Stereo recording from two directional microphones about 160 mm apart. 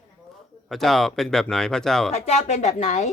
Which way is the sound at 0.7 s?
Centre (ahead or behind).